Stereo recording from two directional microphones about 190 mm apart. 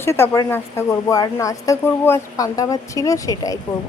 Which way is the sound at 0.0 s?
15° left (ahead or behind).